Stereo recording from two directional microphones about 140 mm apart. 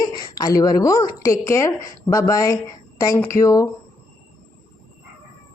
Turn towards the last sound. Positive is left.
turn(degrees=20)  # may be behind; listen again after turning